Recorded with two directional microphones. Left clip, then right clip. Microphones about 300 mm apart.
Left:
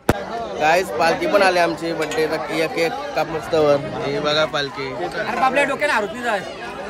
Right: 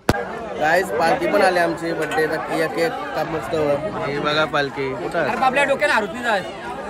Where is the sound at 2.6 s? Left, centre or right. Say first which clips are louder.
Even; centre.